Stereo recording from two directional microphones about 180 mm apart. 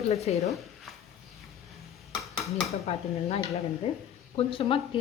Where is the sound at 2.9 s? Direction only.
35° left (ahead or behind).